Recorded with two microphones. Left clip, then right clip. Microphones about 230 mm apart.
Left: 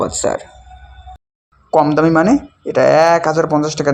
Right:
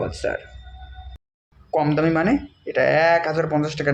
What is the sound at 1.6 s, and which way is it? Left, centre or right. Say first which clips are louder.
Speech: left 8 dB; left.